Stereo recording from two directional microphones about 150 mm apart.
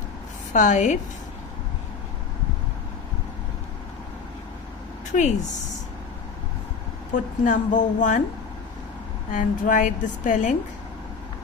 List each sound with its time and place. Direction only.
0.5 s a woman's voice: 55° left (ahead or behind)
5.1 s a woman's voice: 55° left (ahead or behind)
7.4 s a woman's voice: 55° left (ahead or behind)
9.3 s a woman's voice: 60° left (ahead or behind)